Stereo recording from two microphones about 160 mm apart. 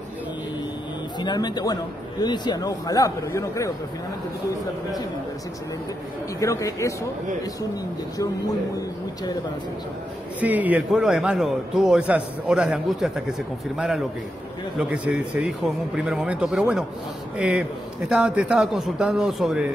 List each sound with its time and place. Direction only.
1.2 s a man's voice: 25° left (ahead or behind)
6.4 s a man's voice: 20° left (ahead or behind)
10.4 s a man's voice: 10° right (ahead or behind)